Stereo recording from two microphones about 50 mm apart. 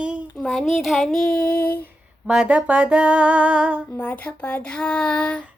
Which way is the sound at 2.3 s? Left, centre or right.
Right.